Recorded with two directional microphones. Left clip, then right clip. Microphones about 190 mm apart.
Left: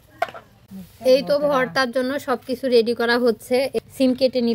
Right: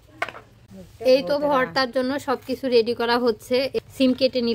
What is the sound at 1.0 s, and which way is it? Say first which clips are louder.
A woman's voice: left 2 dB; 20° left (ahead or behind).